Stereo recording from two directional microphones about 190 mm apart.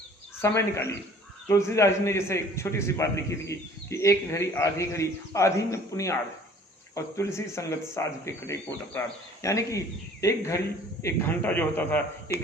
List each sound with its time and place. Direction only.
0.4 s a man's voice: 15° left (ahead or behind)